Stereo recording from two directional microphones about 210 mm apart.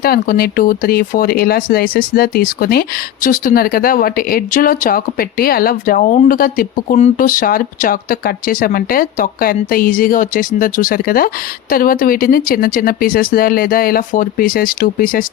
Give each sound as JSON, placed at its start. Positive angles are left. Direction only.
{"t": 0.0, "sound": "speech", "side_deg": 45}